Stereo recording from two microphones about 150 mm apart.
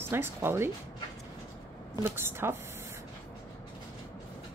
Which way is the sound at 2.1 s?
15° right (ahead or behind).